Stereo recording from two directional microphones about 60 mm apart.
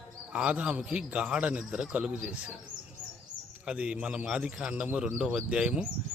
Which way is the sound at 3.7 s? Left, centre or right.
Centre.